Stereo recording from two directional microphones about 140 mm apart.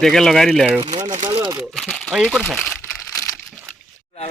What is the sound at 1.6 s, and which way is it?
Speech, centre (ahead or behind).